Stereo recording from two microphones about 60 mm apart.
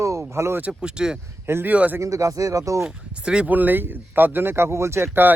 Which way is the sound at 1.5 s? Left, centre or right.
Right.